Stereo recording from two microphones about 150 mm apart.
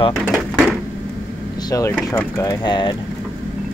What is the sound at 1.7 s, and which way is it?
Speech, 20° left (ahead or behind).